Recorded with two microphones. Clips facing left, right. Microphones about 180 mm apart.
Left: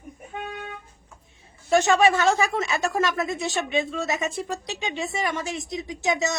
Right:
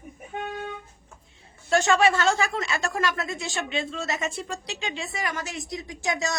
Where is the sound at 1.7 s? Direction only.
20° left (ahead or behind).